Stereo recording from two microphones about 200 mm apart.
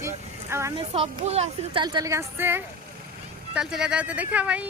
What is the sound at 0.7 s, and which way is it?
Speech, 30° right (ahead or behind).